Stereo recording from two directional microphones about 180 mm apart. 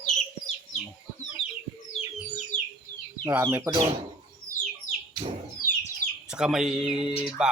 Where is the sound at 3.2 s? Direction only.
15° right (ahead or behind).